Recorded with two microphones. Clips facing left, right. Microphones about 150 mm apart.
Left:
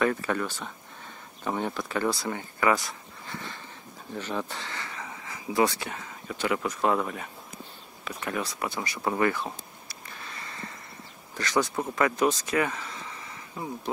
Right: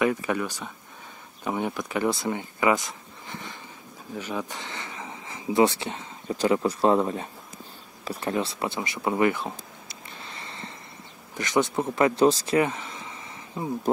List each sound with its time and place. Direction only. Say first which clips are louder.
0.0 s speech: right 2 dB; 15° right (ahead or behind)
4.1 s speech: right 1 dB; 10° right (ahead or behind); by 7.2 s 30° right (ahead or behind)
8.0 s a sound: right 5 dB; 30° right (ahead or behind)
11.3 s speech: right 3 dB; 20° right (ahead or behind)